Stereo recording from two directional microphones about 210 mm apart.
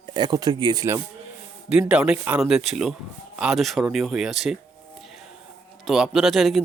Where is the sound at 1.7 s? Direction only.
5° right (ahead or behind).